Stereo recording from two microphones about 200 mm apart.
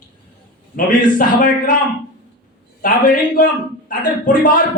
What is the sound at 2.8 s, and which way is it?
A man's voice, 45° left (ahead or behind).